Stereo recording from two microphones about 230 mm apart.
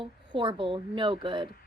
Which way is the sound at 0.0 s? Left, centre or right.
Right.